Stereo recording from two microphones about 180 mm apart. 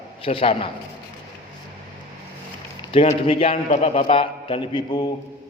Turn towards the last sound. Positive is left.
turn(degrees=25)  # may be behind; listen again after turning